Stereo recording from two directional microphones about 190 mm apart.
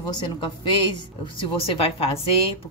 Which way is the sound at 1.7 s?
30° left (ahead or behind).